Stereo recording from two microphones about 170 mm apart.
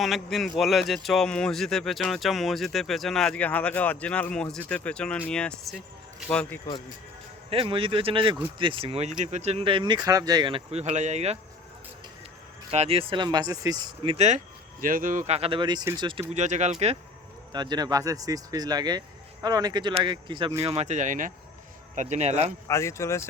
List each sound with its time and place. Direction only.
0.0 s a man's voice: centre (ahead or behind)
7.5 s speech: 30° right (ahead or behind)
12.7 s speech: 35° right (ahead or behind)
16.3 s speech: 45° right (ahead or behind)
17.5 s speech: 25° right (ahead or behind)
20.7 s speech: 40° right (ahead or behind)
22.6 s speech: 15° left (ahead or behind)